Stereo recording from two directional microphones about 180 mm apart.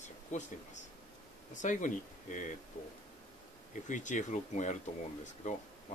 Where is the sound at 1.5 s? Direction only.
45° left (ahead or behind).